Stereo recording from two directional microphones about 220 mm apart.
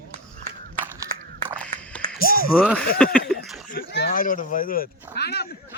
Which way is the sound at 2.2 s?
40° left (ahead or behind).